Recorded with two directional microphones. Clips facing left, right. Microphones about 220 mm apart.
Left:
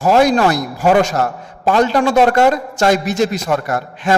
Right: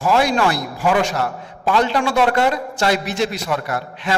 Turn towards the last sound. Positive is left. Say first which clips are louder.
# left 6 dB
turn(degrees=45)  # may be behind; listen again after turning